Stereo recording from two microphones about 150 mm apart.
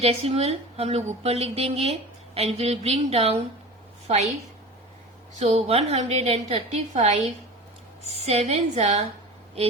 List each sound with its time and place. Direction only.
0.0 s a woman's voice: 45° right (ahead or behind)
5.4 s a woman's voice: 45° right (ahead or behind)